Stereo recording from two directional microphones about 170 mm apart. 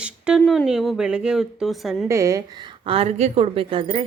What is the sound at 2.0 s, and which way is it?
A woman's voice, 20° right (ahead or behind).